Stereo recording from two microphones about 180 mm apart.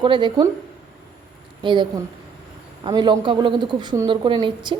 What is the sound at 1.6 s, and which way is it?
A woman's voice, 25° right (ahead or behind).